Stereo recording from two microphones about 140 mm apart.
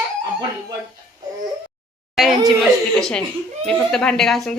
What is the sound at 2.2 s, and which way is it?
A woman's voice, centre (ahead or behind).